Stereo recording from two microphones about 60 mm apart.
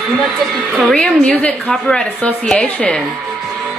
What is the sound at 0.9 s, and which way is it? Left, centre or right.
A woman's voice, centre.